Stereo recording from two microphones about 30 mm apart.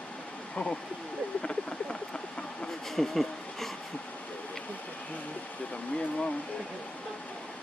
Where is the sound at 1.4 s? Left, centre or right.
Left.